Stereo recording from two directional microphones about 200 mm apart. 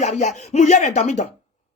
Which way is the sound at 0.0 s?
35° left (ahead or behind).